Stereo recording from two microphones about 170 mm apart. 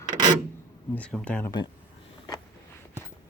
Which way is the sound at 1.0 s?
5° left (ahead or behind).